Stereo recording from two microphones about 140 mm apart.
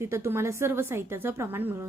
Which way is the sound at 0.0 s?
20° right (ahead or behind).